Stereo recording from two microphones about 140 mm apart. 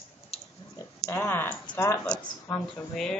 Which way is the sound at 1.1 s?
15° left (ahead or behind).